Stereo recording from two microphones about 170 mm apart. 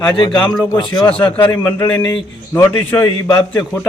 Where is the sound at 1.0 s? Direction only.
5° left (ahead or behind).